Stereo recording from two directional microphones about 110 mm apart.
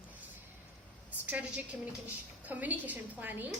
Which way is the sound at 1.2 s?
15° right (ahead or behind).